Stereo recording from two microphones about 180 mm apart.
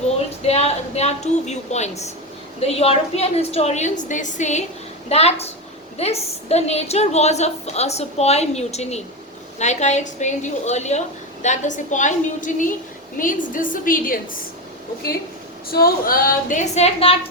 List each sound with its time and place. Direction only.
0.4 s a woman's voice: 35° left (ahead or behind)
15.7 s a woman's voice: 55° left (ahead or behind); by 17.2 s 35° left (ahead or behind)